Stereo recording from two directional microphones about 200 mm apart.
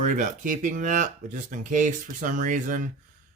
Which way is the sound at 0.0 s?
40° right (ahead or behind).